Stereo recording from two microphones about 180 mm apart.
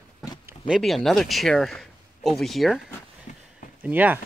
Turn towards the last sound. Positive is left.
turn(degrees=-10)  # may be behind; listen again after turning